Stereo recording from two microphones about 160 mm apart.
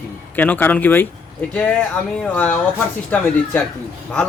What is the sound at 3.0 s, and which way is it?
Speech, 10° left (ahead or behind).